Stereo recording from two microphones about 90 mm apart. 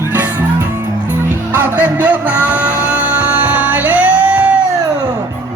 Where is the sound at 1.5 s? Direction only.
20° right (ahead or behind).